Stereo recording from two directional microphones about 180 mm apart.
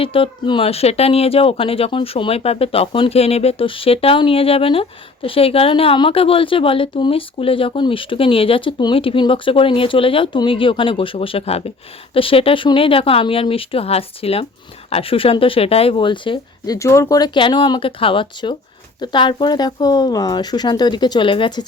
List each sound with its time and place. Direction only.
0.0 s speech: 30° left (ahead or behind)
16.7 s speech: 15° left (ahead or behind)